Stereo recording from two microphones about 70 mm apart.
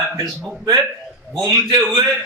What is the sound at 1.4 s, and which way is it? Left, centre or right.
Speech, right.